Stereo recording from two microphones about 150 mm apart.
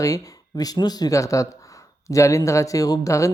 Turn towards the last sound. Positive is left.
turn(degrees=20)  # may be behind; listen again after turning